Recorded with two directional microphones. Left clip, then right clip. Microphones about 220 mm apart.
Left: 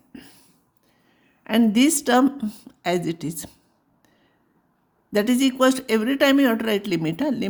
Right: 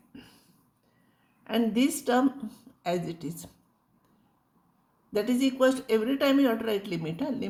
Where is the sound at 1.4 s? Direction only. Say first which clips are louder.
Left 8 dB; 50° left (ahead or behind).